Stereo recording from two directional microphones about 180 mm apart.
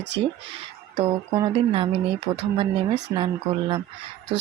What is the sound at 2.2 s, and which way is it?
Speech, 70° right (ahead or behind).